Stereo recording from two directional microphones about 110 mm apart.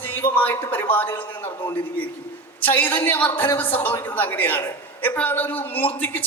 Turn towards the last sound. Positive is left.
turn(degrees=15)  # may be behind; listen again after turning